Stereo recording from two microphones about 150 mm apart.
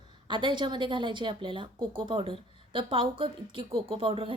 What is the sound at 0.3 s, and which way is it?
Speech, 30° right (ahead or behind).